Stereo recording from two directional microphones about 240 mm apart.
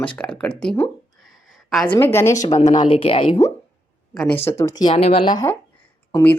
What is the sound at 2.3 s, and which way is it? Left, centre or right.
Speech, left.